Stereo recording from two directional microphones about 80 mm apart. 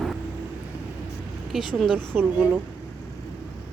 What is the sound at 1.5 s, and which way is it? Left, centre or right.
Speech, centre.